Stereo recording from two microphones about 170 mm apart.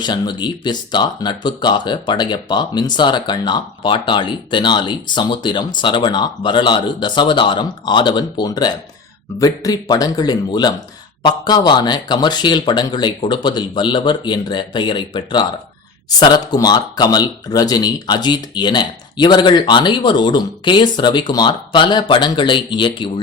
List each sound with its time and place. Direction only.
0.0 s speech: 25° left (ahead or behind)